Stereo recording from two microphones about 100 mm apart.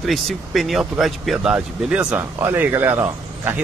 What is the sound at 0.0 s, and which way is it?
Speech, centre (ahead or behind).